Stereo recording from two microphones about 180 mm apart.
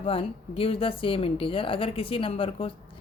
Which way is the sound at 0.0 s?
30° left (ahead or behind).